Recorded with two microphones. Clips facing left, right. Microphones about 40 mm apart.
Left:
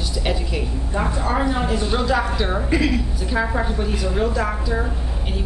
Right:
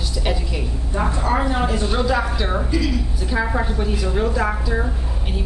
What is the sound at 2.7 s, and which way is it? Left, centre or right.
Speech, left.